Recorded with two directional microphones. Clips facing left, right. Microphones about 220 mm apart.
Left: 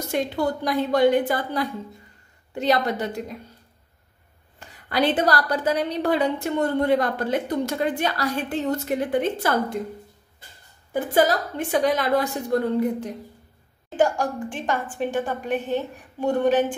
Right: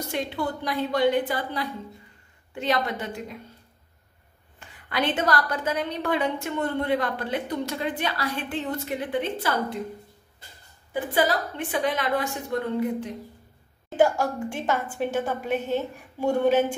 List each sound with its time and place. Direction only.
0.1 s a woman's voice: 45° left (ahead or behind)
4.6 s a woman's voice: 40° left (ahead or behind)
10.9 s a woman's voice: 45° left (ahead or behind)
14.2 s a woman's voice: 10° right (ahead or behind)
15.4 s a woman's voice: 15° left (ahead or behind)
16.2 s a woman's voice: 10° right (ahead or behind)